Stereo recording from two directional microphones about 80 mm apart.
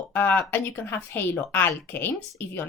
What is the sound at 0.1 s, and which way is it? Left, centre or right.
Speech, left.